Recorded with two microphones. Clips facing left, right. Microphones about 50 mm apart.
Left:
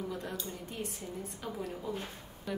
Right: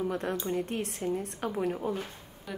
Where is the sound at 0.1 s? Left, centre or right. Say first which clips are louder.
Right 9 dB; right.